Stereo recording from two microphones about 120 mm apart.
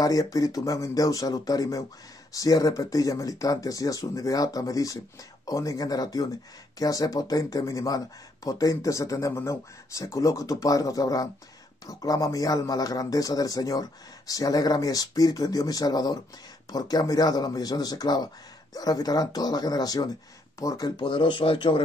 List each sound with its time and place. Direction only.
0.0 s speech: 30° left (ahead or behind); by 21.8 s 45° left (ahead or behind)